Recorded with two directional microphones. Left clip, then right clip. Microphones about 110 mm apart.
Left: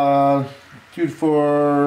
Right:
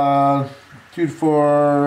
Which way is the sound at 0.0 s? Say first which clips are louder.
Even; centre (ahead or behind).